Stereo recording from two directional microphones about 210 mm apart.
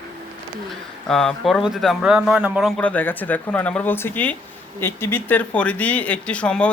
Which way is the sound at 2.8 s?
5° left (ahead or behind).